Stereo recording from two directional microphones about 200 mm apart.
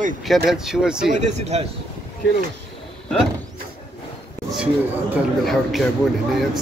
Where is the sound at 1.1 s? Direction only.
35° right (ahead or behind).